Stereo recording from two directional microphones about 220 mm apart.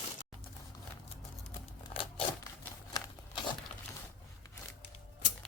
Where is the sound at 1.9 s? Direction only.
25° left (ahead or behind).